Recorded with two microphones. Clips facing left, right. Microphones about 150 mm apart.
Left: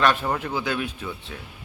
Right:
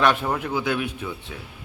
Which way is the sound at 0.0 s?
15° right (ahead or behind).